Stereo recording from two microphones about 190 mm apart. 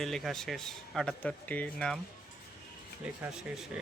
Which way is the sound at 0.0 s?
Centre (ahead or behind).